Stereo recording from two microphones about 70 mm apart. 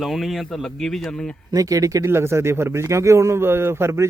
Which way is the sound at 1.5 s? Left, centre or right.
Right.